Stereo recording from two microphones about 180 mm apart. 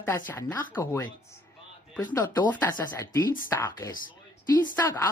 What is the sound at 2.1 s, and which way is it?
Speech, 15° left (ahead or behind).